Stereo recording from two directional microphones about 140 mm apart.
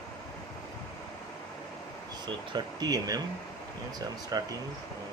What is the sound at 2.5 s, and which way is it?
Speech, 25° right (ahead or behind).